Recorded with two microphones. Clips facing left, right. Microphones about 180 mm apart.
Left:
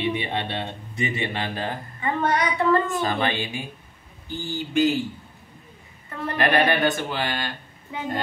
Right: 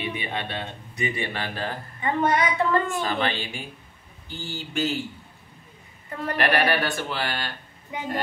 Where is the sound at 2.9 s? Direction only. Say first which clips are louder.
Left 2 dB; 20° left (ahead or behind).